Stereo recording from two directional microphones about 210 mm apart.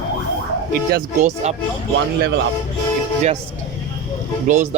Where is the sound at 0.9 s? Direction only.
35° right (ahead or behind).